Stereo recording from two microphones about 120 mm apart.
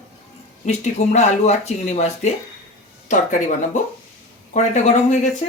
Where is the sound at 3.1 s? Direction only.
90° left.